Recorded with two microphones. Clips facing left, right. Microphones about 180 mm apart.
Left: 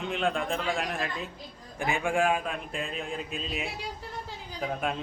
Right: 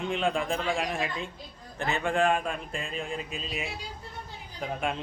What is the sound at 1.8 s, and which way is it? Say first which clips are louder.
A man's voice: even; 10° left (ahead or behind).